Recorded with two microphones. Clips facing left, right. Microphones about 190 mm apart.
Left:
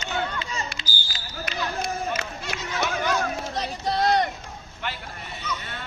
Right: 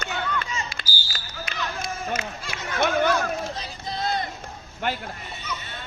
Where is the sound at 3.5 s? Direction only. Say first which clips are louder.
Left 7 dB; 70° left (ahead or behind).